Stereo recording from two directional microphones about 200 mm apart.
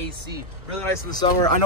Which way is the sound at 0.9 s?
20° left (ahead or behind).